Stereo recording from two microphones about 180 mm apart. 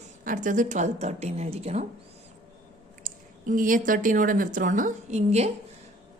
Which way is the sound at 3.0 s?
50° right (ahead or behind).